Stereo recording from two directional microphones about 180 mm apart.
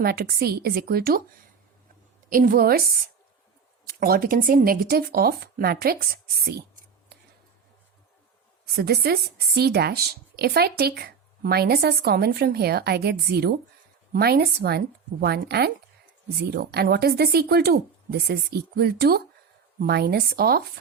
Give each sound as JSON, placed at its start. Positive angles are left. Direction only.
{"t": 0.0, "sound": "speech", "side_deg": -60}
{"t": 2.3, "sound": "speech", "side_deg": -50}
{"t": 4.0, "sound": "speech", "side_deg": -55}
{"t": 8.7, "sound": "speech", "side_deg": -60}